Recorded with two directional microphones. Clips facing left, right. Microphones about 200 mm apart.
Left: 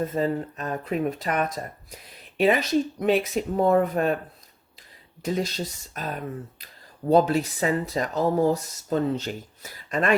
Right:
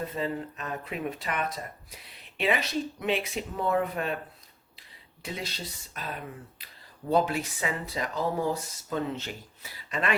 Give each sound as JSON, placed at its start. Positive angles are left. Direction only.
{"t": 0.0, "sound": "speech", "side_deg": 45}
{"t": 5.2, "sound": "speech", "side_deg": 45}